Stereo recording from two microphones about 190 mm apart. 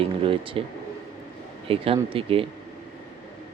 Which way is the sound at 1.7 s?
30° right (ahead or behind).